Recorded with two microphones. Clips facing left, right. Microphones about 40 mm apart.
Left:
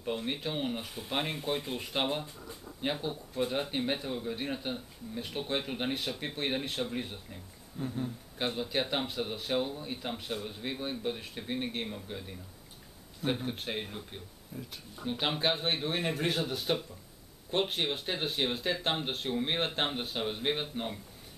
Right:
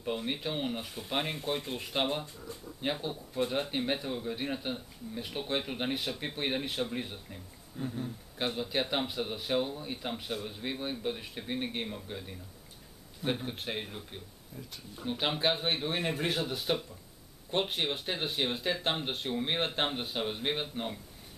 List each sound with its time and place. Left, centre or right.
0.0 s speech: centre
14.5 s speech: left
15.0 s speech: centre